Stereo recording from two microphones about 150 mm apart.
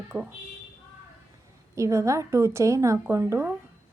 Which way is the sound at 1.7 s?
20° right (ahead or behind).